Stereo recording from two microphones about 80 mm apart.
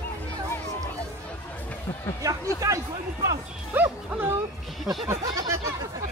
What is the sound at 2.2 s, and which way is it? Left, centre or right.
Speech, right.